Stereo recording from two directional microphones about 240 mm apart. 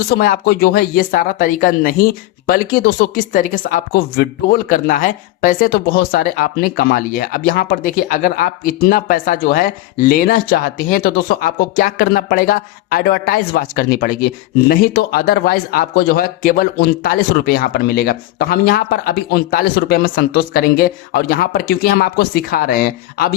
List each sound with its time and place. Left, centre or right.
0.2 s speech: left